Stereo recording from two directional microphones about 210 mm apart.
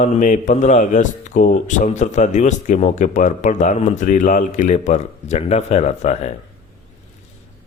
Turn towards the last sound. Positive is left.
turn(degrees=30)  # may be behind; listen again after turning